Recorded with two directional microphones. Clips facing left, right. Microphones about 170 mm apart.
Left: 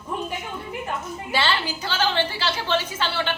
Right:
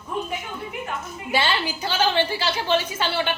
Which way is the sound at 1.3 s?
15° right (ahead or behind).